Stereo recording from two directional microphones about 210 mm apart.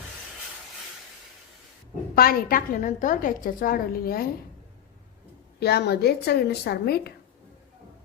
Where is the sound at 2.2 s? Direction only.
45° left (ahead or behind).